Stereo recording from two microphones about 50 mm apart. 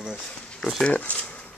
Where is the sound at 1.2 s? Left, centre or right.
Left.